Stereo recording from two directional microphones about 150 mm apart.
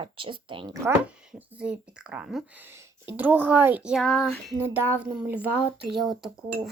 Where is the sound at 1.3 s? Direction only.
10° right (ahead or behind).